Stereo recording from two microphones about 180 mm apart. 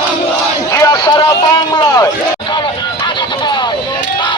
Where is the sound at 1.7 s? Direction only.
20° left (ahead or behind).